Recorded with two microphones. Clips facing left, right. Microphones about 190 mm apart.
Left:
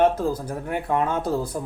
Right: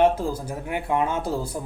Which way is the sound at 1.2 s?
30° right (ahead or behind).